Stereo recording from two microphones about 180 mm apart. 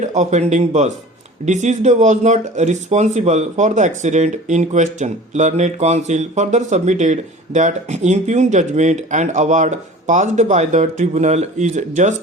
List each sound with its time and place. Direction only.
0.0 s speech: 40° right (ahead or behind)